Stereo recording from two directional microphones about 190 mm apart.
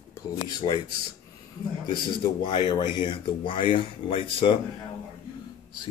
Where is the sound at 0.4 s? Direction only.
20° left (ahead or behind).